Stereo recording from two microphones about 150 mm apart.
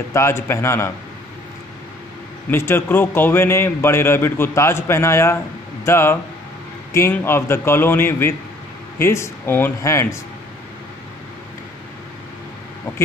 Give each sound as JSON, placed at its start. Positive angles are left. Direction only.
{"t": 0.1, "sound": "a man's voice", "side_deg": 15}
{"t": 2.5, "sound": "a man's voice", "side_deg": 15}